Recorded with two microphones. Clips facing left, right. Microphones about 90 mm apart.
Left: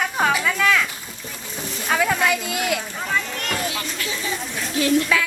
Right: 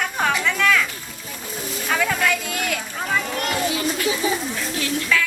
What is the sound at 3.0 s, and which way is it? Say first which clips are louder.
Children playing: right 2 dB; 10° right (ahead or behind).